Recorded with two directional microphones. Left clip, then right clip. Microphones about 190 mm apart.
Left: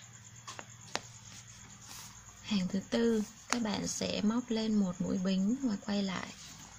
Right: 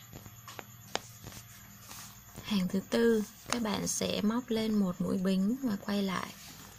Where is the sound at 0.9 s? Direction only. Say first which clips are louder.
Right 2 dB; 25° right (ahead or behind).